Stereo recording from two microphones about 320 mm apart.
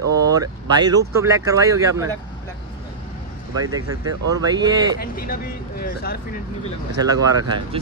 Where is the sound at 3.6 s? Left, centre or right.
Centre.